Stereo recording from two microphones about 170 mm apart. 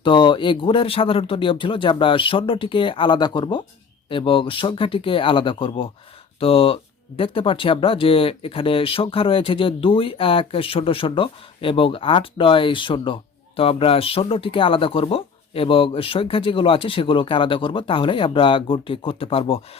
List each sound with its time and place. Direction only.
0.0 s speech: 25° left (ahead or behind)